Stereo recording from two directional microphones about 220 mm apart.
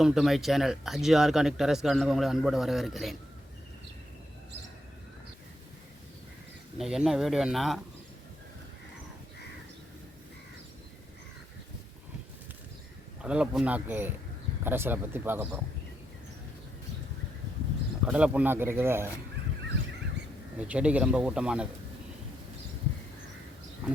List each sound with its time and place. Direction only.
0.0 s speech: centre (ahead or behind)
6.7 s speech: centre (ahead or behind)
13.2 s speech: 5° right (ahead or behind)
18.0 s speech: 5° right (ahead or behind)
20.6 s speech: 5° right (ahead or behind)